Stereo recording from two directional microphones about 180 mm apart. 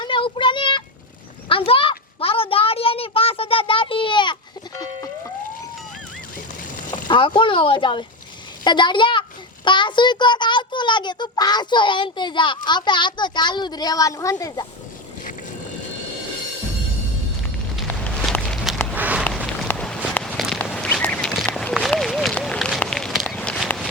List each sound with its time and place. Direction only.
0.0 s child singing: 30° left (ahead or behind)
1.5 s a sound: 30° left (ahead or behind)
6.9 s a child's voice: 25° left (ahead or behind)
17.8 s walk: 5° left (ahead or behind)
19.6 s a sound: 5° left (ahead or behind)
20.1 s walk: centre (ahead or behind)